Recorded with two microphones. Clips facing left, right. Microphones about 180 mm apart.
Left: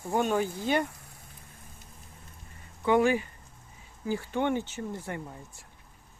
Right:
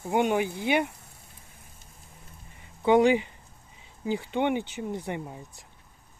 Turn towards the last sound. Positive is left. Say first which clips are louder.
# right 3 dB
turn(degrees=-15)  # may be behind; listen again after turning